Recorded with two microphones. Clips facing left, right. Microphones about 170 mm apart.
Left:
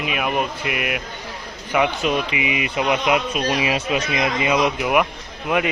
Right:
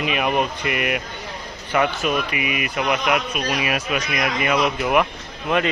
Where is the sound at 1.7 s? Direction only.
15° left (ahead or behind).